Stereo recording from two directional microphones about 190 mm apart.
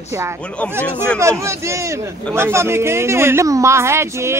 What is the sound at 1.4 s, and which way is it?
Speech, 15° right (ahead or behind).